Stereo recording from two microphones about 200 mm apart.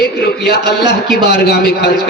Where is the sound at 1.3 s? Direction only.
55° left (ahead or behind).